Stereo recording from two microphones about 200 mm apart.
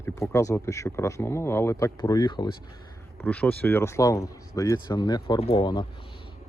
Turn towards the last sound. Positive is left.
turn(degrees=20)  # may be behind; listen again after turning